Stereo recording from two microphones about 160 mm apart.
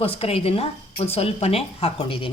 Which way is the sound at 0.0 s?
35° left (ahead or behind).